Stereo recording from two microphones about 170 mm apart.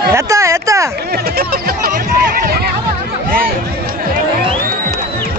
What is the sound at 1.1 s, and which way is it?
Speech, 65° right (ahead or behind).